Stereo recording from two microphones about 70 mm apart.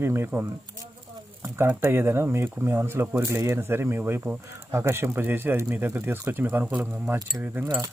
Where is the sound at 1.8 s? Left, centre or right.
Right.